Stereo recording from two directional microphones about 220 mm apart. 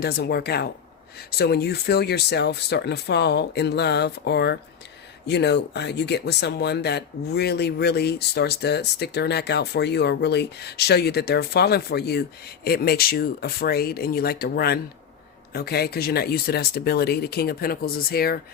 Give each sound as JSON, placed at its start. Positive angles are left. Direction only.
{"t": 0.0, "sound": "speech", "side_deg": 45}